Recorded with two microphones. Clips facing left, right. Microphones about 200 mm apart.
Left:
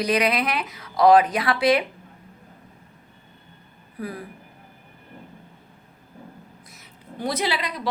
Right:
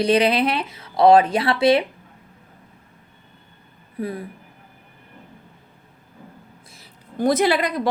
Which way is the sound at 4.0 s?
25° right (ahead or behind).